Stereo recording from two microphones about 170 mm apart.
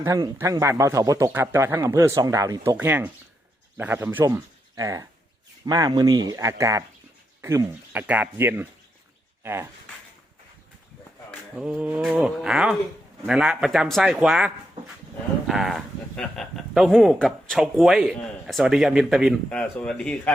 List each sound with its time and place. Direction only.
0.0 s speech: 15° right (ahead or behind)
11.5 s speech: 5° right (ahead or behind)